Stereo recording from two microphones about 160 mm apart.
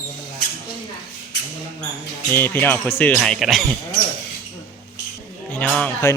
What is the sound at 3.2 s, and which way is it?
Speech, centre (ahead or behind).